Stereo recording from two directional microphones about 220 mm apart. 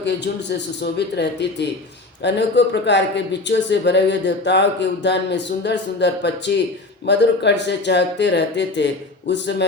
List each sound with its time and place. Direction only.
0.0 s speech: 50° left (ahead or behind)